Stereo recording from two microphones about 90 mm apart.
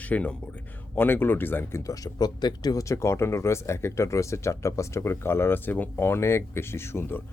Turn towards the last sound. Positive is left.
turn(degrees=25)  # may be behind; listen again after turning